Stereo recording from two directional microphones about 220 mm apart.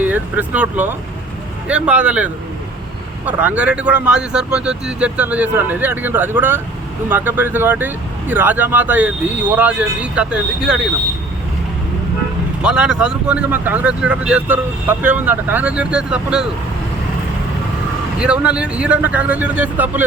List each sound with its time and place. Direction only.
0.0 s speech: 5° right (ahead or behind)
12.6 s speech: 5° right (ahead or behind)
18.2 s speech: 5° right (ahead or behind)